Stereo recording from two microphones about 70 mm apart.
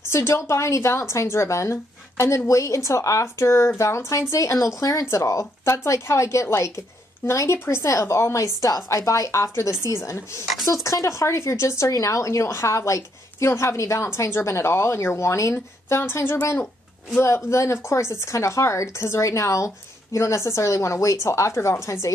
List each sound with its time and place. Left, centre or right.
0.1 s a woman's voice: left
5.1 s a woman's voice: left
8.5 s speech: left
8.8 s a woman's voice: left
11.9 s a woman's voice: left
16.0 s a woman's voice: left